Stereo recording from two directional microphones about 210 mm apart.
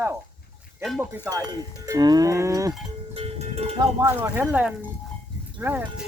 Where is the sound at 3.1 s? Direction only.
30° right (ahead or behind).